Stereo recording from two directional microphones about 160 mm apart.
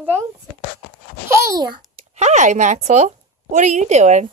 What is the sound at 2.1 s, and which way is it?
A woman's voice, 45° right (ahead or behind).